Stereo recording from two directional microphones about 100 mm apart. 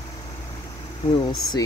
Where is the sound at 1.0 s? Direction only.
55° left (ahead or behind).